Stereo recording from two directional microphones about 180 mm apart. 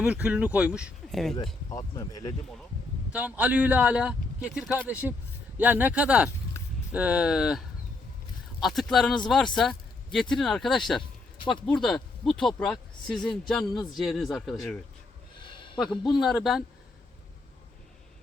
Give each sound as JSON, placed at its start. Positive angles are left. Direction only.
{"t": 0.0, "sound": "a man's voice", "side_deg": -5}
{"t": 1.7, "sound": "speech", "side_deg": 20}
{"t": 3.1, "sound": "a man's voice", "side_deg": -10}
{"t": 8.6, "sound": "speech", "side_deg": 0}
{"t": 11.3, "sound": "a sound", "side_deg": 25}
{"t": 11.6, "sound": "speech", "side_deg": 0}
{"t": 15.4, "sound": "a sound", "side_deg": 25}
{"t": 16.1, "sound": "speech", "side_deg": 0}